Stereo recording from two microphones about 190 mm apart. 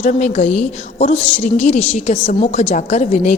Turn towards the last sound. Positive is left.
turn(degrees=40)  # may be behind; listen again after turning